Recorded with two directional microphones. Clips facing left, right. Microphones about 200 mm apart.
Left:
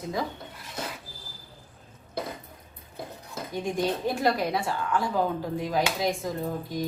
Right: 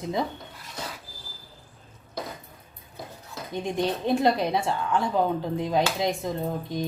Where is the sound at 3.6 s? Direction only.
20° right (ahead or behind).